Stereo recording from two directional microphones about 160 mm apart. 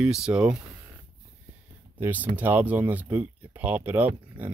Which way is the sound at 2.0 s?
10° right (ahead or behind).